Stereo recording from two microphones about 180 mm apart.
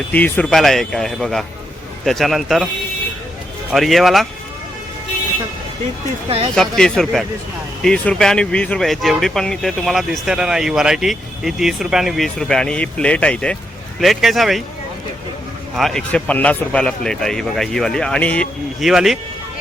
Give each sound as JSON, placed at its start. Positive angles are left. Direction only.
{"t": 0.1, "sound": "speech", "side_deg": 10}
{"t": 3.7, "sound": "speech", "side_deg": 0}
{"t": 6.2, "sound": "speech", "side_deg": -30}
{"t": 6.6, "sound": "speech", "side_deg": 5}
{"t": 15.7, "sound": "speech", "side_deg": 0}